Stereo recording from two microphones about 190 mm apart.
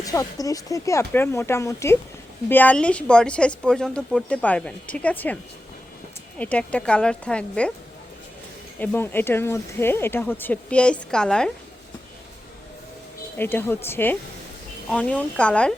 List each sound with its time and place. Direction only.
0.0 s speech: 20° left (ahead or behind)
6.4 s speech: 5° left (ahead or behind)
8.8 s speech: 10° left (ahead or behind)
13.4 s speech: 10° left (ahead or behind)